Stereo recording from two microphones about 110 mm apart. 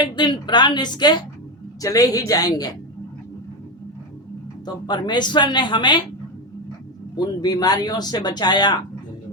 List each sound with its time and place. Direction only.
0.0 s speech: 45° left (ahead or behind)
4.6 s speech: 40° left (ahead or behind)
7.4 s speech: 35° left (ahead or behind)